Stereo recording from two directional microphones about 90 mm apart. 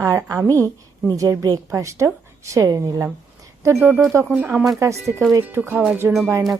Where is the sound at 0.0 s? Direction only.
35° right (ahead or behind).